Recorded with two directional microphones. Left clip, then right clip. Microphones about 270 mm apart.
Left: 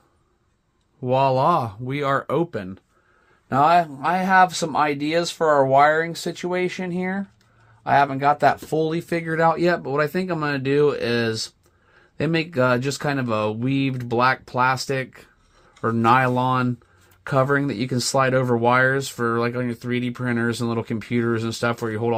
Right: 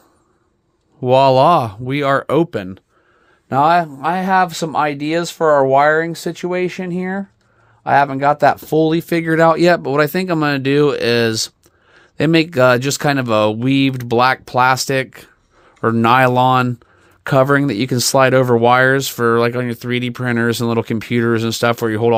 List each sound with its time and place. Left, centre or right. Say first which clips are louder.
1.0 s speech: right 8 dB; right